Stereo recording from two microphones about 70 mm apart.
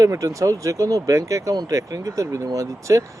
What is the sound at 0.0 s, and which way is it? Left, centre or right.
Speech, right.